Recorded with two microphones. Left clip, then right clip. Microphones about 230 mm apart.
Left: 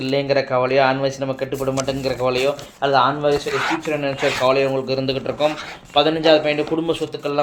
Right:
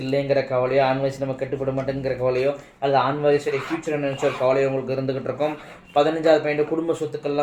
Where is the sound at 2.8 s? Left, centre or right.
Left.